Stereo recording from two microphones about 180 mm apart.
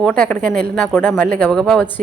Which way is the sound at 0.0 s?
5° left (ahead or behind).